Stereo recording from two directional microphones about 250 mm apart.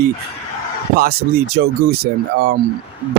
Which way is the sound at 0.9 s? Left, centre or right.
Right.